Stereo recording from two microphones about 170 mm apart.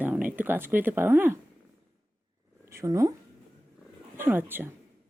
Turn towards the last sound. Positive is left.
turn(degrees=-10)  # may be behind; listen again after turning